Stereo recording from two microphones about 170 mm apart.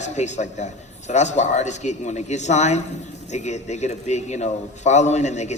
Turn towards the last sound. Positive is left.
turn(degrees=40)  # may be behind; listen again after turning